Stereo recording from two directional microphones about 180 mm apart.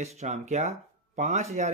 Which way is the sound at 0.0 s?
40° right (ahead or behind).